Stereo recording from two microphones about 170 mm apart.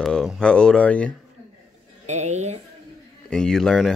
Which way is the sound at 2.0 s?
40° right (ahead or behind).